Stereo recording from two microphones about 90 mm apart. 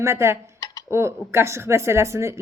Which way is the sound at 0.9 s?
30° right (ahead or behind).